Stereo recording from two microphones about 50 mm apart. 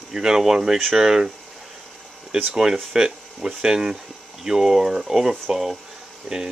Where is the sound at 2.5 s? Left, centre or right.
Centre.